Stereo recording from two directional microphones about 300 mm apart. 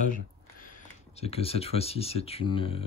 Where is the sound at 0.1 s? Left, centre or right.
Left.